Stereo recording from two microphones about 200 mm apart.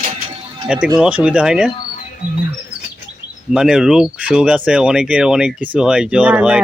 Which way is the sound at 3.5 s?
5° right (ahead or behind).